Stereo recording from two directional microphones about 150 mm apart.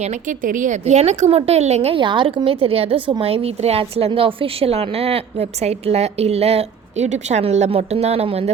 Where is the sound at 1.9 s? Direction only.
35° right (ahead or behind).